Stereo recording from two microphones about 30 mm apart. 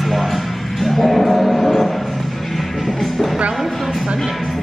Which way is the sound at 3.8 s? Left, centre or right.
Centre.